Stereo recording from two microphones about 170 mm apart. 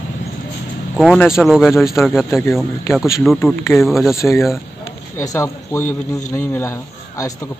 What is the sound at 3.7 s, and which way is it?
Speech, centre (ahead or behind).